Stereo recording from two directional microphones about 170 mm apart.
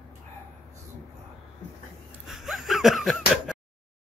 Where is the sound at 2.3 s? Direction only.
Centre (ahead or behind).